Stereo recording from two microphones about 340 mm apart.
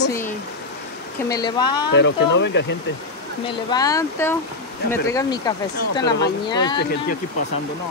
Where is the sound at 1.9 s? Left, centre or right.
Left.